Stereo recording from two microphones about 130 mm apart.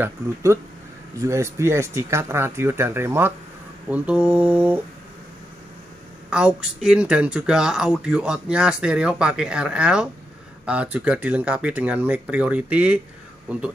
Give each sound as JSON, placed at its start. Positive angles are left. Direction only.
{"t": 0.0, "sound": "speech", "side_deg": -20}
{"t": 6.3, "sound": "speech", "side_deg": -5}